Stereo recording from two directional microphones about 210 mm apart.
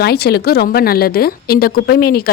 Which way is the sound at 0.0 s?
50° left (ahead or behind).